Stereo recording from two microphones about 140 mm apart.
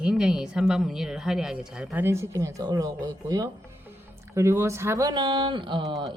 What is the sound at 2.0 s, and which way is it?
Speech, 20° right (ahead or behind).